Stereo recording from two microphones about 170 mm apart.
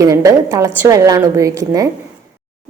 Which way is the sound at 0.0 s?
20° right (ahead or behind).